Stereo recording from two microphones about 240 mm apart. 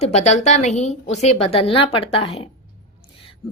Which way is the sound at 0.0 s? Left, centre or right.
Left.